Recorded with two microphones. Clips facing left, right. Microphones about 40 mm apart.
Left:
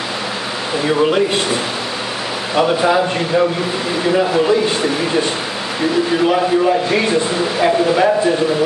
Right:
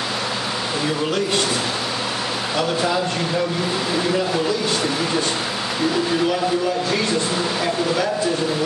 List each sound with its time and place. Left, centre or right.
0.8 s speech: left